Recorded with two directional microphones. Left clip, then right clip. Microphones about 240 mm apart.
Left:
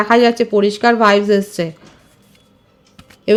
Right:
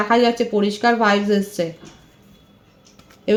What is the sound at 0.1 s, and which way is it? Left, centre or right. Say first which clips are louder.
Speech: left 5 dB; left.